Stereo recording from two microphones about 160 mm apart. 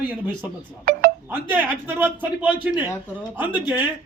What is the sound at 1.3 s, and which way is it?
A man's voice, 10° right (ahead or behind).